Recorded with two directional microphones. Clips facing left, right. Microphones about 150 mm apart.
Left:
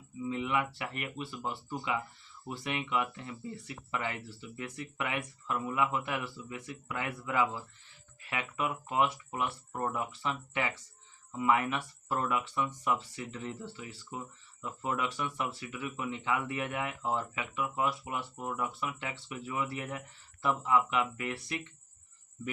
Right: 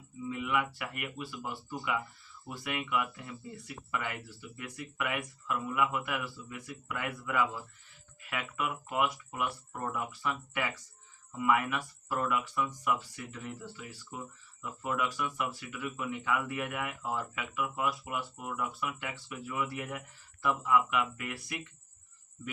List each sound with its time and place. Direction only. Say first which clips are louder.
0.3 s speech: even; 25° left (ahead or behind)